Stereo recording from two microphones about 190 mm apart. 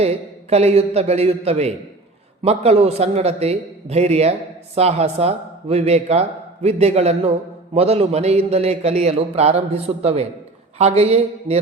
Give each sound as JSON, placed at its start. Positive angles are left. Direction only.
{"t": 0.0, "sound": "a man's voice", "side_deg": -35}